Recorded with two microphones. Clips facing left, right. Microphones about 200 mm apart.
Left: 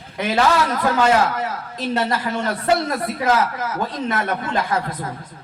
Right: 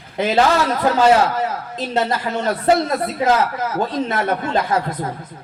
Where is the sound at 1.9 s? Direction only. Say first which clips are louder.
Right 2 dB; 25° right (ahead or behind).